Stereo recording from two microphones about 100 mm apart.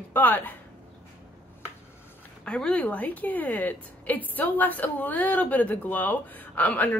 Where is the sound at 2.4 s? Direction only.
10° left (ahead or behind).